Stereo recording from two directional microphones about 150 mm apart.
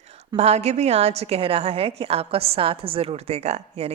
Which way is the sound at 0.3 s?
45° right (ahead or behind).